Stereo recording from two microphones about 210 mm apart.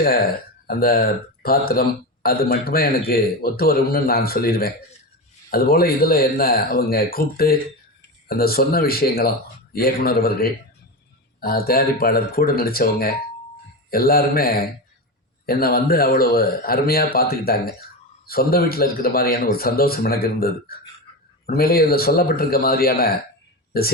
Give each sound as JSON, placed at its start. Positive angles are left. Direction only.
{"t": 0.7, "sound": "speech", "side_deg": 45}